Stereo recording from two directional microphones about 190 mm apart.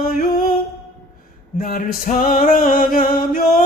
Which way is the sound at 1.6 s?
50° left (ahead or behind).